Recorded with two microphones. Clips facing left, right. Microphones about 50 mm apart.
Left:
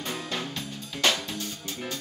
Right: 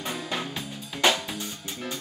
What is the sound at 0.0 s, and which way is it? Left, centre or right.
Music, centre.